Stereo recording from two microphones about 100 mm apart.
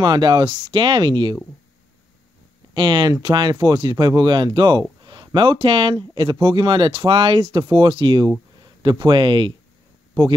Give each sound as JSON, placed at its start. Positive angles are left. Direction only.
{"t": 0.0, "sound": "speech", "side_deg": -50}
{"t": 2.7, "sound": "speech", "side_deg": -50}